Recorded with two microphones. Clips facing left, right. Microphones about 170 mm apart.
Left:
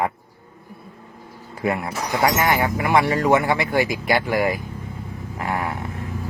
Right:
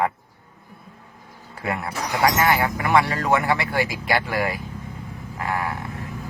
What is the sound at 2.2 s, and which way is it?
Speech, 20° left (ahead or behind).